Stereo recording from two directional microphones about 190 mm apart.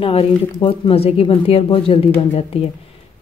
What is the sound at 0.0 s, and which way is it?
Speech, 30° left (ahead or behind).